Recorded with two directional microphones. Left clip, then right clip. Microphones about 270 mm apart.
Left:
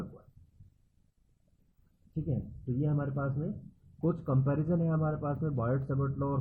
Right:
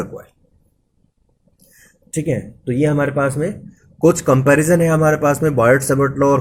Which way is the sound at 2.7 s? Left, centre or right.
Right.